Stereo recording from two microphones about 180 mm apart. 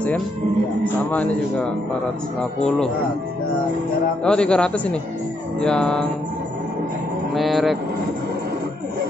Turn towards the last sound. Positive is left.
turn(degrees=0)  # may be behind; listen again after turning